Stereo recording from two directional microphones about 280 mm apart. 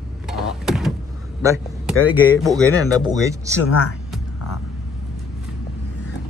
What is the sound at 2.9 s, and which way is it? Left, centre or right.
Speech, centre.